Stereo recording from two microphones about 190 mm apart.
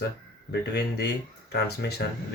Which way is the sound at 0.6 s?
60° left (ahead or behind).